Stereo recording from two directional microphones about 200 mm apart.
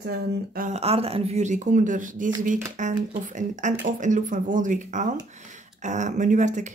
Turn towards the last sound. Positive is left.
turn(degrees=-35)  # may be behind; listen again after turning